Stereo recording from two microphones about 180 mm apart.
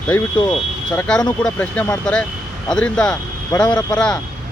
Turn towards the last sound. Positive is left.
turn(degrees=20)  # may be behind; listen again after turning